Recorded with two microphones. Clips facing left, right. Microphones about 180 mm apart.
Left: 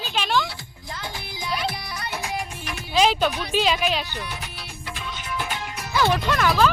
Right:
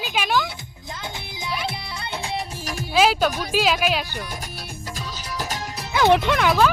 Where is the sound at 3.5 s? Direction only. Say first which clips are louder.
Right 1 dB; 5° right (ahead or behind).